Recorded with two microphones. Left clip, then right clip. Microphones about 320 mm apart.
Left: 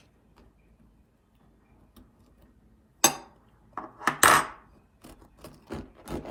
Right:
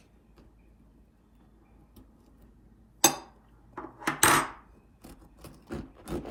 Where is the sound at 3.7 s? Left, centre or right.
Centre.